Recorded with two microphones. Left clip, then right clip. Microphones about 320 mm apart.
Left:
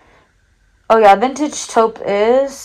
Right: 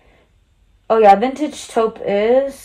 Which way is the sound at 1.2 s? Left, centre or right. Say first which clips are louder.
Left 3 dB; centre.